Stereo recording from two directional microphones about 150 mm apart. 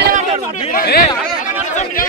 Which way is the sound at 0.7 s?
65° left (ahead or behind).